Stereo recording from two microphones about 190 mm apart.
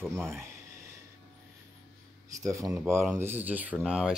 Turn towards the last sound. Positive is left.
turn(degrees=-5)  # may be behind; listen again after turning